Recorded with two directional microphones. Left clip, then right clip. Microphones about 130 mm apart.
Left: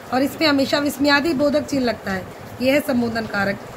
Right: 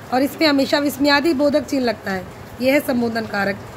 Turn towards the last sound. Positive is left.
turn(degrees=-45)  # may be behind; listen again after turning